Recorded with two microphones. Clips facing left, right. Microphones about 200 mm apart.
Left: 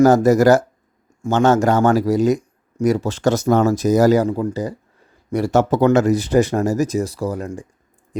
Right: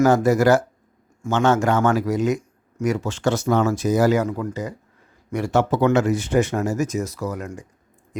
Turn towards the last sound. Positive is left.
turn(degrees=30)  # may be behind; listen again after turning